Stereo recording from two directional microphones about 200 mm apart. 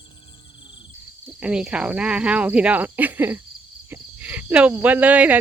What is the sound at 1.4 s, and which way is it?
Speech, 5° right (ahead or behind).